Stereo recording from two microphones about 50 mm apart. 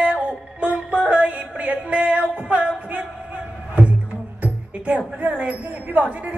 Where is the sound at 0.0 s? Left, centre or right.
Right.